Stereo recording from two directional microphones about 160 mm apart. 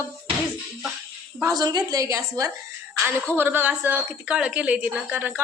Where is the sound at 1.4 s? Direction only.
20° right (ahead or behind).